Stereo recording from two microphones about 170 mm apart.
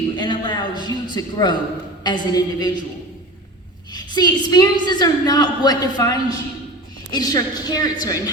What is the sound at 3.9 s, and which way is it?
A woman's voice, 25° left (ahead or behind).